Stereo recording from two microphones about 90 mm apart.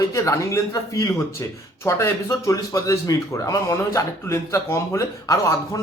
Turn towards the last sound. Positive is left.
turn(degrees=35)  # may be behind; listen again after turning